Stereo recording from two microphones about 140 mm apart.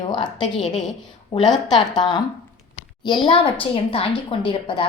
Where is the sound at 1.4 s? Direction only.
30° left (ahead or behind).